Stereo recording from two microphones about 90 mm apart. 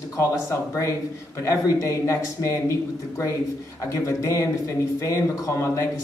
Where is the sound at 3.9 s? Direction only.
35° left (ahead or behind).